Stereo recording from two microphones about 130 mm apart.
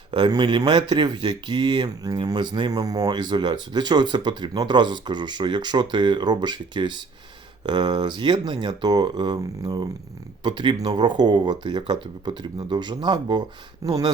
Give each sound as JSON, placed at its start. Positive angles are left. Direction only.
{"t": 0.1, "sound": "speech", "side_deg": -35}